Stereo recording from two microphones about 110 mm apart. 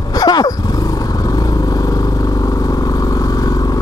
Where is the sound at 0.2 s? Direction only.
40° left (ahead or behind).